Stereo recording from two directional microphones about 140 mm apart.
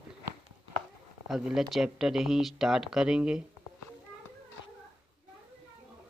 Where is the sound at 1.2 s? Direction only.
5° right (ahead or behind).